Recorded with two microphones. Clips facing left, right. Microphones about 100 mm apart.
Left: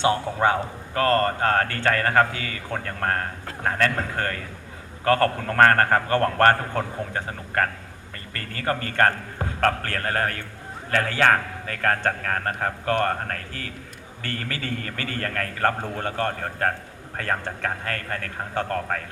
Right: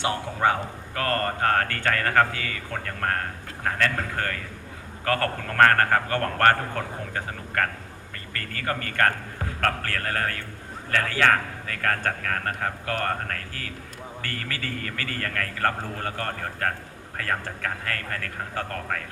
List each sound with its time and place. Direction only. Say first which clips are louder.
0.9 s a man's voice: left 5 dB; 30° left (ahead or behind)